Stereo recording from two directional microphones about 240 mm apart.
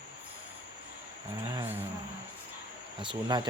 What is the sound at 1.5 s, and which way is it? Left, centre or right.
Speech, centre.